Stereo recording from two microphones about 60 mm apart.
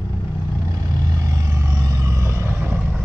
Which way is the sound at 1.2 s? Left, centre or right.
Right.